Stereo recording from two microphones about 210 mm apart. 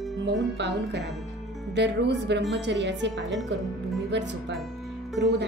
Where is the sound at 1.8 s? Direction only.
55° right (ahead or behind).